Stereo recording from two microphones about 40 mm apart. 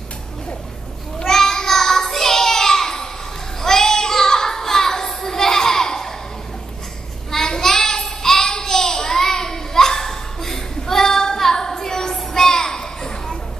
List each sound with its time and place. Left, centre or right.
1.2 s a sound: centre
3.6 s child singing: centre
7.2 s child singing: centre